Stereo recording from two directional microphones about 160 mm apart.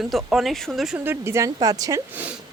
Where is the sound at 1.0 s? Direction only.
15° right (ahead or behind).